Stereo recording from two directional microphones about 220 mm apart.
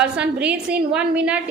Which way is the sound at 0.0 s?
5° right (ahead or behind).